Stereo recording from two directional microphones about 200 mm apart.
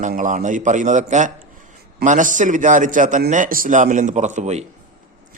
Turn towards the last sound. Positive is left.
turn(degrees=-35)  # may be behind; listen again after turning